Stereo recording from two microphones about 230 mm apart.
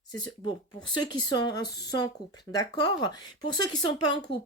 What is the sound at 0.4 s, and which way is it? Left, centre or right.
Speech, centre.